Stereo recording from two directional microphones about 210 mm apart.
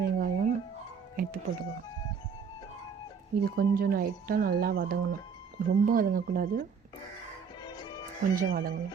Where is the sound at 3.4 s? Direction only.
45° right (ahead or behind).